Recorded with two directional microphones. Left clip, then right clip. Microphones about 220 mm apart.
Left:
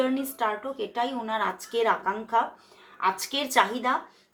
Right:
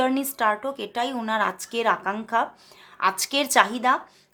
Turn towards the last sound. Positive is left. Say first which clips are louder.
# right 4 dB
turn(degrees=-45)  # may be behind; listen again after turning